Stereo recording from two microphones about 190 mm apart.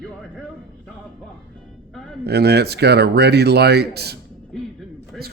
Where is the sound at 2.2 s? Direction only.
60° right (ahead or behind).